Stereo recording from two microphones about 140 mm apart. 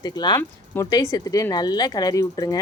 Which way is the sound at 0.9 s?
25° left (ahead or behind).